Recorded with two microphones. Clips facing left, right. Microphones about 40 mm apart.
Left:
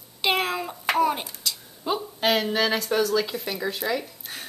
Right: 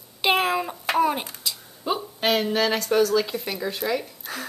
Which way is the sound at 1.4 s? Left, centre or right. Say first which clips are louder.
Even; centre.